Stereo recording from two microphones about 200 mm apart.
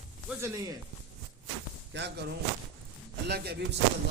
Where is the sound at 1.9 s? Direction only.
60° right (ahead or behind).